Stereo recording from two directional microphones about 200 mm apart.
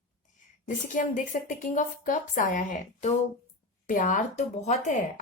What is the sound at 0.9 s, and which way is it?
A woman's voice, 40° left (ahead or behind).